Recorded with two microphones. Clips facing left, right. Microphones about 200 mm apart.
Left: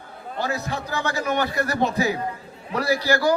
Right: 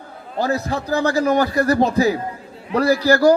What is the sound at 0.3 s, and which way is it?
A man's voice, 35° right (ahead or behind).